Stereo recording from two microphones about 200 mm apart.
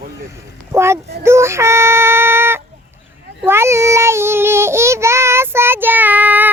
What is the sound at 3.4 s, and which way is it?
Child singing, 10° right (ahead or behind).